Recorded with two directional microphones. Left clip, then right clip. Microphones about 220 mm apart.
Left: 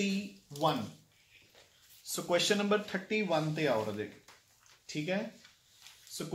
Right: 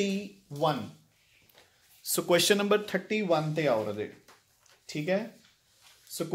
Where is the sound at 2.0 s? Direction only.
45° right (ahead or behind).